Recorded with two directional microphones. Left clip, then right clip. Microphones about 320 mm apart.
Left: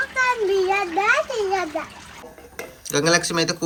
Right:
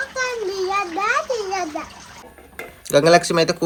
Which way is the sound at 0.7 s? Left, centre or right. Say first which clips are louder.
Left 1 dB; centre.